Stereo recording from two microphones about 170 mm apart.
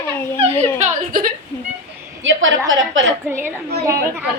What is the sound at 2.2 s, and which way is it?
Speech, 90° right.